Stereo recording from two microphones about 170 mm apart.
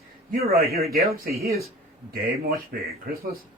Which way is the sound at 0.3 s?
65° right (ahead or behind).